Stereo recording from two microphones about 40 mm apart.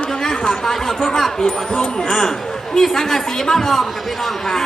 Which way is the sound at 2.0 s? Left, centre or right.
Centre.